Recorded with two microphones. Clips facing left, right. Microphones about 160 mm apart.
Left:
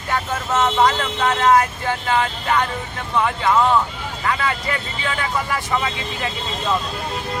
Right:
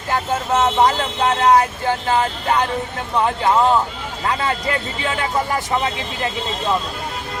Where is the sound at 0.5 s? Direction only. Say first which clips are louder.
Right 1 dB; 20° right (ahead or behind).